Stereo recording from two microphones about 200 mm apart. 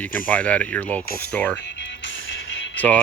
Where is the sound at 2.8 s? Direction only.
10° left (ahead or behind).